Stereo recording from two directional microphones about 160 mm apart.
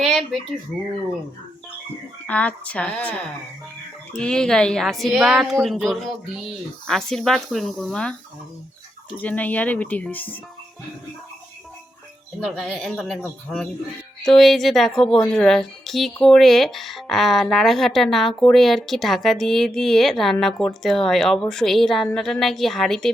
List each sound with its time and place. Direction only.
0.0 s a sound: centre (ahead or behind)
2.2 s speech: 10° left (ahead or behind)
9.2 s speech: 10° left (ahead or behind)
12.4 s speech: centre (ahead or behind)